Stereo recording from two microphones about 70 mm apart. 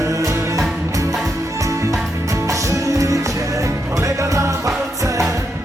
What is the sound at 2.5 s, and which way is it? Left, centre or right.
Music, right.